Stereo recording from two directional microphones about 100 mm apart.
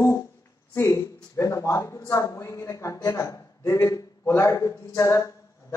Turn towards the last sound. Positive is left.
turn(degrees=30)  # may be behind; listen again after turning